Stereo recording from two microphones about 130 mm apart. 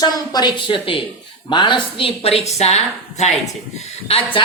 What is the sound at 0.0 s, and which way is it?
A woman's voice, 30° left (ahead or behind).